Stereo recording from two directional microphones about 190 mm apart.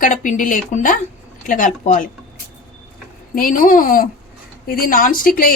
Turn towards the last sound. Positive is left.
turn(degrees=50)  # may be behind; listen again after turning